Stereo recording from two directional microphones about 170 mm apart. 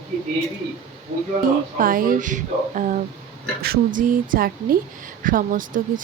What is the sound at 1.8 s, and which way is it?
A woman's voice, 55° right (ahead or behind).